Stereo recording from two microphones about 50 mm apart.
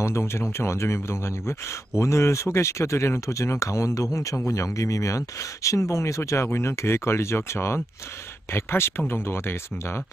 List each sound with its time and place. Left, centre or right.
0.3 s speech: left
6.4 s speech: left